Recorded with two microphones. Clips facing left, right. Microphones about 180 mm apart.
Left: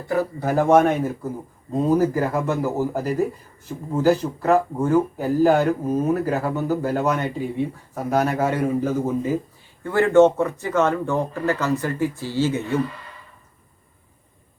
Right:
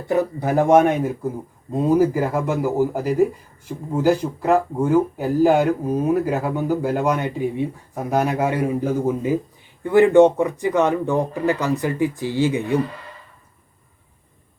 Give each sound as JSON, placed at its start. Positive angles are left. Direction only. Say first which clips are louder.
{"t": 0.1, "sound": "speech", "louder": "right 2 dB", "side_deg": -15}